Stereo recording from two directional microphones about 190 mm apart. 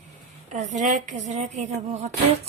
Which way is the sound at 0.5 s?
40° right (ahead or behind).